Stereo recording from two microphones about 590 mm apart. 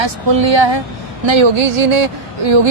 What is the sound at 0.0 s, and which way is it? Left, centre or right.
Speech, right.